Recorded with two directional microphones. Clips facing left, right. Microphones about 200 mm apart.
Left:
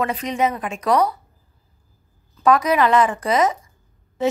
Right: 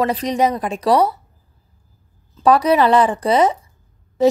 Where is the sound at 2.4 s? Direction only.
30° right (ahead or behind).